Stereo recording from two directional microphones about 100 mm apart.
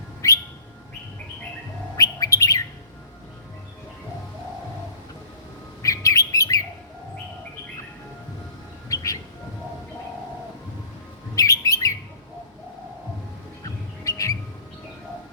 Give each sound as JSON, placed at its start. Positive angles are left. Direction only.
{"t": 0.2, "sound": "bird", "side_deg": 30}
{"t": 2.0, "sound": "bird", "side_deg": 35}
{"t": 5.8, "sound": "bird", "side_deg": 35}
{"t": 8.9, "sound": "bird", "side_deg": 35}
{"t": 11.3, "sound": "bird", "side_deg": 35}
{"t": 14.0, "sound": "bird", "side_deg": 35}